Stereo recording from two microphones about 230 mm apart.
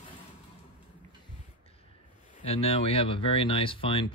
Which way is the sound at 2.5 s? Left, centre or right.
Left.